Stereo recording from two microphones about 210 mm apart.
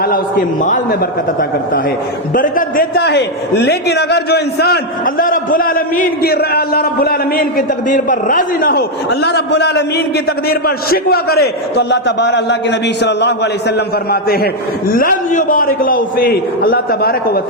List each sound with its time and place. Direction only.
0.0 s a man's voice: 40° left (ahead or behind)
2.3 s a man's voice: 40° left (ahead or behind)